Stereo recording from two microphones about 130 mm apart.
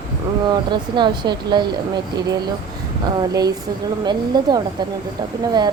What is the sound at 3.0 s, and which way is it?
Speech, 30° right (ahead or behind).